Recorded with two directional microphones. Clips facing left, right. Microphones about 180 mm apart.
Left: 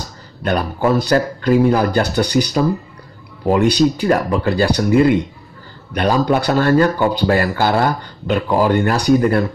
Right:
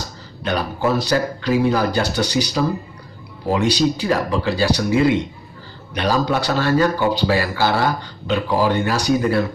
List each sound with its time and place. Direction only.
0.5 s speech: 55° left (ahead or behind)